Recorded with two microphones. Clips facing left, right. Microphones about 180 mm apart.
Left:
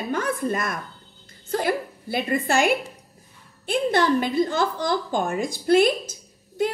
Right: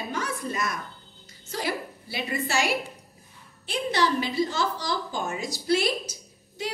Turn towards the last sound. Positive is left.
turn(degrees=50)  # may be behind; listen again after turning